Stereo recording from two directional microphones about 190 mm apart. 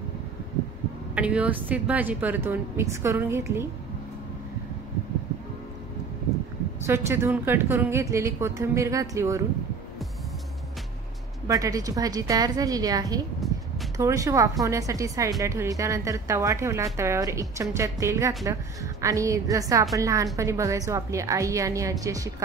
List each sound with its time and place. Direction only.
1.1 s a woman's voice: 5° right (ahead or behind)
6.9 s a woman's voice: 15° right (ahead or behind)
11.4 s a woman's voice: 15° right (ahead or behind)
13.4 s a sound: centre (ahead or behind)
13.9 s a woman's voice: 15° right (ahead or behind)